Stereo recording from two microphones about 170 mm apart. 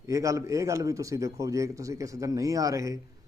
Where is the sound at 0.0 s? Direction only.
20° right (ahead or behind).